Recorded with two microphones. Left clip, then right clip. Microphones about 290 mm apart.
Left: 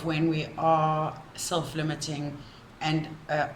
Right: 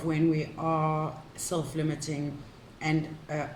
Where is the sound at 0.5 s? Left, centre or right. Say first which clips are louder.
Left 6 dB; left.